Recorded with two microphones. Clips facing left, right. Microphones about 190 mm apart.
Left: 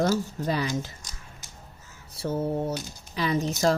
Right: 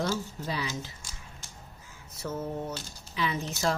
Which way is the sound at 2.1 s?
30° left (ahead or behind).